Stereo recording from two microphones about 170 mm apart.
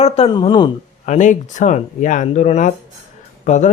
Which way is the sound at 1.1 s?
45° left (ahead or behind).